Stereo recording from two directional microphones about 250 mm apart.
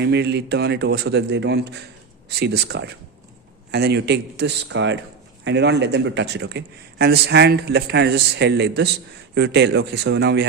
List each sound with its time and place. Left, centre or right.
0.0 s a man's voice: right